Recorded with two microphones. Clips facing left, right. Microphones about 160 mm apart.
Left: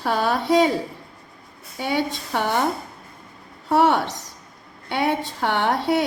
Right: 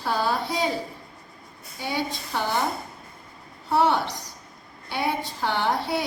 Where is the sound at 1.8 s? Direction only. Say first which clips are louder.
Left 5 dB; 60° left (ahead or behind).